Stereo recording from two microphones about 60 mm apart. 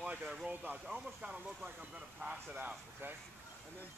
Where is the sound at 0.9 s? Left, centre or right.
Centre.